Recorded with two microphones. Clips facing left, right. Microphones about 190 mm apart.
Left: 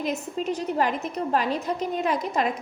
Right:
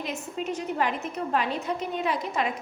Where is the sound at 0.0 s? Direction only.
40° left (ahead or behind).